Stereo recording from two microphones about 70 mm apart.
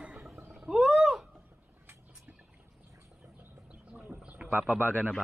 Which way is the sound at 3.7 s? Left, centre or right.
Centre.